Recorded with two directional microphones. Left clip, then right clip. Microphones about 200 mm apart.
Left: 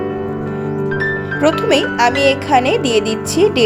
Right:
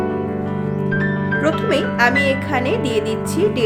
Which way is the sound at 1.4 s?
20° left (ahead or behind).